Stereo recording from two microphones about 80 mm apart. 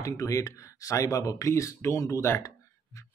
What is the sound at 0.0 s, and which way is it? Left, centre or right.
Speech, left.